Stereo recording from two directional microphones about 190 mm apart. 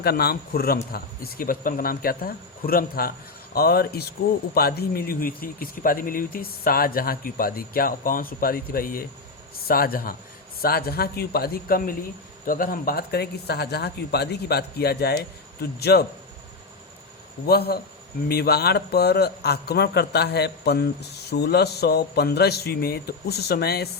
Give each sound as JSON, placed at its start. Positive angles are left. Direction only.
{"t": 0.0, "sound": "a man's voice", "side_deg": 55}
{"t": 17.4, "sound": "a man's voice", "side_deg": 55}